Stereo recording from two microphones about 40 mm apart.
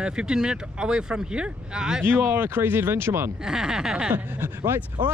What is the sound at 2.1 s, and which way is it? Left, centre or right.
Speech, right.